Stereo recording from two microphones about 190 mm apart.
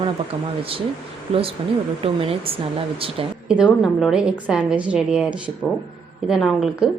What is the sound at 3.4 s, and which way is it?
A woman's voice, 5° right (ahead or behind).